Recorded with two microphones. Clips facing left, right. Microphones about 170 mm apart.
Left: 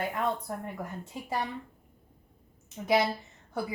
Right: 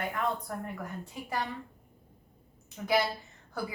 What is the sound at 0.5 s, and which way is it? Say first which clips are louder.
Speech: left 1 dB; 25° left (ahead or behind).